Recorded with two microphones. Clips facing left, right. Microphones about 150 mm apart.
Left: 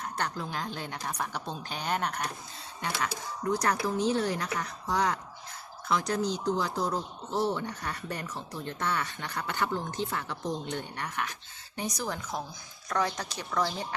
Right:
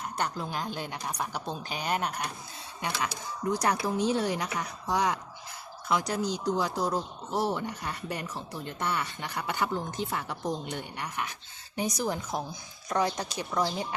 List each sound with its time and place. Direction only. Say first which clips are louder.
0.2 s a woman's voice: right 2 dB; 10° right (ahead or behind)
3.6 s a woman's voice: right 2 dB; 15° right (ahead or behind)